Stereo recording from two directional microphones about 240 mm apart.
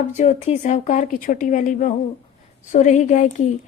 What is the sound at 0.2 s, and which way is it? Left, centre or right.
A woman's voice, left.